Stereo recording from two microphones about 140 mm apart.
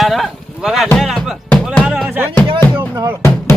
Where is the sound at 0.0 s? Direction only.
Centre (ahead or behind).